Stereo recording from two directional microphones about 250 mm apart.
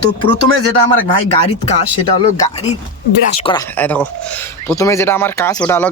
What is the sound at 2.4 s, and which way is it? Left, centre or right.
Speech, left.